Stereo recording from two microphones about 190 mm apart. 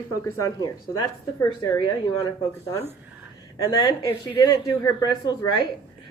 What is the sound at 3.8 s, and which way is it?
Speech, 20° left (ahead or behind).